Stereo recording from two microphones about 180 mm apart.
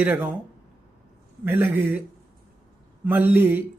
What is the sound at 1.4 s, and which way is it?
Speech, 10° right (ahead or behind).